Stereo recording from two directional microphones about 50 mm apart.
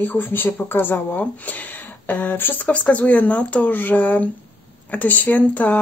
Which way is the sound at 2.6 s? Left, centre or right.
Left.